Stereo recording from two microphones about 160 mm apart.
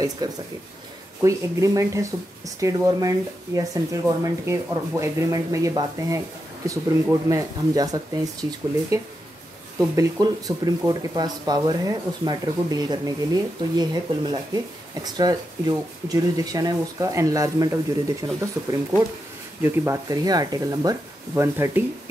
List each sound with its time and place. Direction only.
0.2 s speech: 25° right (ahead or behind)